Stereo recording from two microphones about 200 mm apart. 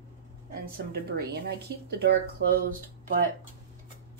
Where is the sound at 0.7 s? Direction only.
50° right (ahead or behind).